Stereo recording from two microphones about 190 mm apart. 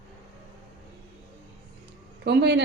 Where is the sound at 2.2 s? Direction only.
65° right (ahead or behind).